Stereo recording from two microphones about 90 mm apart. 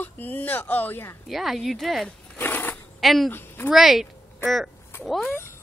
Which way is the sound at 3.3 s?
25° left (ahead or behind).